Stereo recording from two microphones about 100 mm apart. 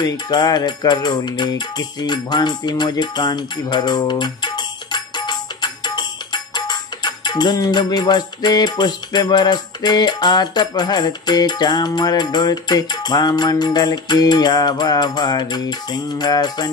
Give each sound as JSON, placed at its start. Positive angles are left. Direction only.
{"t": 0.0, "sound": "music", "side_deg": 45}